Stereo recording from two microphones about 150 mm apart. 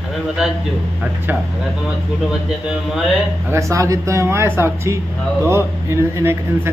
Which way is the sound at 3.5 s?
20° right (ahead or behind).